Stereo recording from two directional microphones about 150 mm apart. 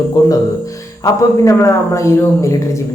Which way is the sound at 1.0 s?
20° left (ahead or behind).